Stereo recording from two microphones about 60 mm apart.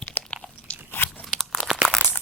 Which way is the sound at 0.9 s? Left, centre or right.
Left.